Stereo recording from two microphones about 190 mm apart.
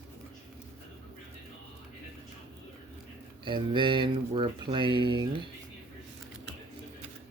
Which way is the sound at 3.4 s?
25° right (ahead or behind).